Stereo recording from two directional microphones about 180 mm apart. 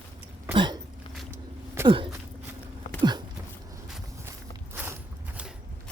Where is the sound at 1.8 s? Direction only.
30° right (ahead or behind).